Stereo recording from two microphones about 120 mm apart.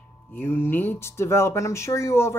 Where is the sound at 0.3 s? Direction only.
15° left (ahead or behind).